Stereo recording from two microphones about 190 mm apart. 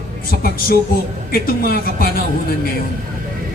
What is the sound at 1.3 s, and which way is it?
Speech, 50° left (ahead or behind).